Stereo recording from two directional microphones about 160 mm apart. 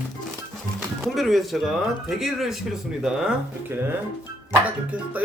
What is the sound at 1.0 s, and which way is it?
Speech, centre (ahead or behind).